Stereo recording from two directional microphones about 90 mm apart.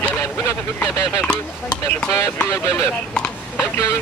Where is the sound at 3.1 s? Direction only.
10° left (ahead or behind).